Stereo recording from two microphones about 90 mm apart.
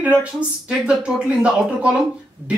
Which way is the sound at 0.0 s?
15° right (ahead or behind).